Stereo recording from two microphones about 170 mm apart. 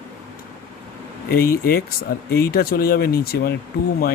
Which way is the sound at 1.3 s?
60° left (ahead or behind).